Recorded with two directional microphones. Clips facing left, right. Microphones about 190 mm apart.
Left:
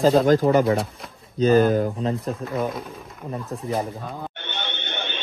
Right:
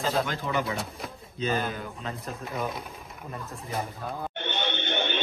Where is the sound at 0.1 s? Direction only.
45° left (ahead or behind).